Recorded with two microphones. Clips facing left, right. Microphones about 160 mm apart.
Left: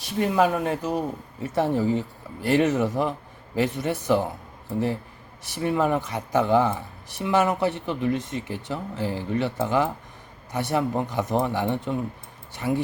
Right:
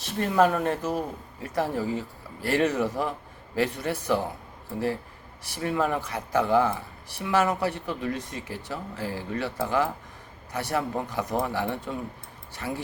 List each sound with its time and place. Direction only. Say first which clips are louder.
0.2 s speech: left 1 dB; 10° left (ahead or behind)
5.6 s speech: left 3 dB; 20° left (ahead or behind)